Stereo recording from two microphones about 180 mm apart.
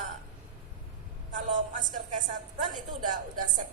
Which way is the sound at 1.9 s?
45° right (ahead or behind).